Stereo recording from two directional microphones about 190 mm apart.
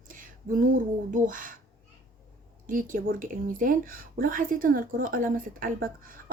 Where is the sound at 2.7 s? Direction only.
45° right (ahead or behind).